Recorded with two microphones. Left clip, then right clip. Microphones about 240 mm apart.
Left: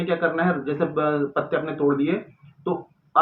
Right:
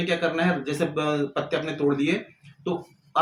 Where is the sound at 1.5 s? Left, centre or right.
Right.